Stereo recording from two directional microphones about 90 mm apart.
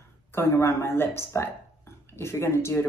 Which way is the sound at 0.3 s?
30° left (ahead or behind).